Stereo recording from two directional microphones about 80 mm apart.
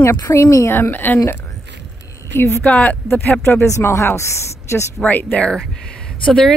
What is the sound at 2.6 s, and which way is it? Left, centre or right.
Speech, centre.